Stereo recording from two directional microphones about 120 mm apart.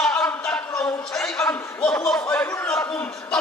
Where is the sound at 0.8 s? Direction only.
25° left (ahead or behind).